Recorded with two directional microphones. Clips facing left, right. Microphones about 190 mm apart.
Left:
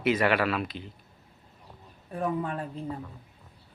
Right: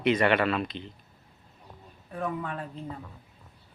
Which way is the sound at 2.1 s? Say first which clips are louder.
Left 3 dB; 30° left (ahead or behind).